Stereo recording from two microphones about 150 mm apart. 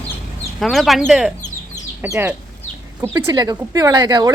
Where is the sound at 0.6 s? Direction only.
Centre (ahead or behind).